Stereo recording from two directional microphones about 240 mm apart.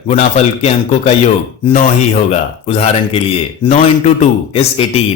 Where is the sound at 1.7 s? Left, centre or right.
Left.